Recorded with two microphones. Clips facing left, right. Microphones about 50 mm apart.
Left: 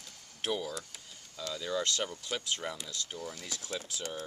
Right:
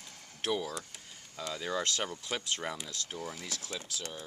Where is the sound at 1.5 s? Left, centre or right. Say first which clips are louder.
Left 1 dB; right.